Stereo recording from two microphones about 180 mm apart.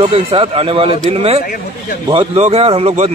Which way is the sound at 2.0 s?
35° right (ahead or behind).